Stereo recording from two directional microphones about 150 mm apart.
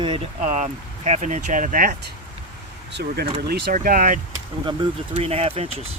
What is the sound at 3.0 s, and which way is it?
Speech, 90° right.